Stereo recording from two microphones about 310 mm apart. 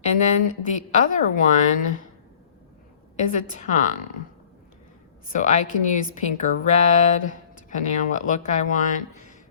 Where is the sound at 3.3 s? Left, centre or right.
Left.